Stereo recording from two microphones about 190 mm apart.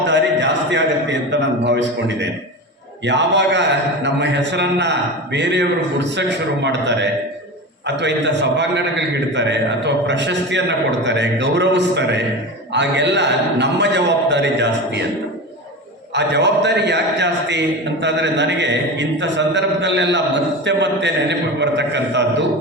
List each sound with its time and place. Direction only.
0.0 s a sound: 70° right (ahead or behind)
1.3 s a man's voice: 65° right (ahead or behind)
16.1 s a man's voice: 65° right (ahead or behind)